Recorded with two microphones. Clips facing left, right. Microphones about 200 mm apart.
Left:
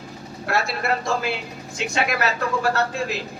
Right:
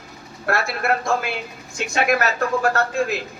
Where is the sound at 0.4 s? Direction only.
50° right (ahead or behind).